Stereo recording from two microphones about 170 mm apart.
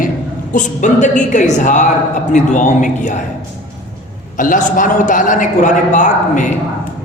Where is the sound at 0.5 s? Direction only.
45° left (ahead or behind).